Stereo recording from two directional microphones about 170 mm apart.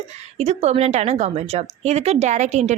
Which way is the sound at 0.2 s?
40° right (ahead or behind).